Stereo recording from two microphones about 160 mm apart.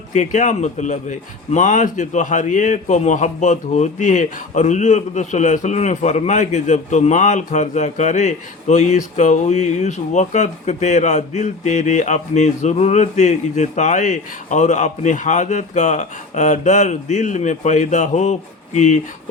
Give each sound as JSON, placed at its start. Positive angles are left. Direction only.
{"t": 0.1, "sound": "a man's voice", "side_deg": 50}